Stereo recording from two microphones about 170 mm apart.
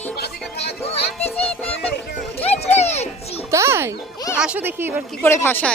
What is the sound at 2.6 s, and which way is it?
Children playing, 40° left (ahead or behind).